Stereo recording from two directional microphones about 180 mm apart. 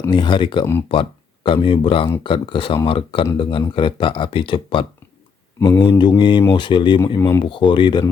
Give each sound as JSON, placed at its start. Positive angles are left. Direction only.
{"t": 0.1, "sound": "speech", "side_deg": 25}
{"t": 5.5, "sound": "speech", "side_deg": 15}
{"t": 7.2, "sound": "speech", "side_deg": 15}
{"t": 7.5, "sound": "speech", "side_deg": 25}